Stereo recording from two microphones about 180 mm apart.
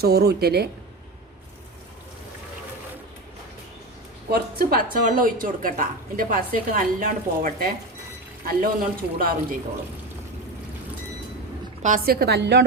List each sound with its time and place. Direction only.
0.0 s speech: 60° right (ahead or behind)
4.3 s speech: 55° right (ahead or behind)
11.8 s speech: 45° right (ahead or behind)
12.2 s a woman's voice: 70° right (ahead or behind)